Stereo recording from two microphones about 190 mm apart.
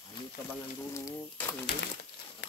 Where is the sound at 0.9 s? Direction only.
15° left (ahead or behind).